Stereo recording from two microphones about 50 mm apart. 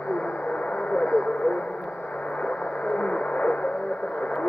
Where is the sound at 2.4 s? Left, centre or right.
Left.